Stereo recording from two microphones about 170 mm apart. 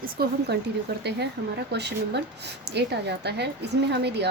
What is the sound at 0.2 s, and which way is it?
Speech, 65° right (ahead or behind).